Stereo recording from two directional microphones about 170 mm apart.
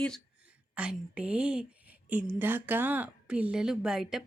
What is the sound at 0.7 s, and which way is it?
A woman's voice, 5° right (ahead or behind).